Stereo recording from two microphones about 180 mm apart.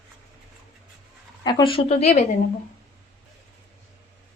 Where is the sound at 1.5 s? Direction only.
25° left (ahead or behind).